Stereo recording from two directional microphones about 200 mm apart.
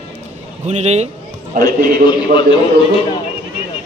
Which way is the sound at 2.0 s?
25° left (ahead or behind).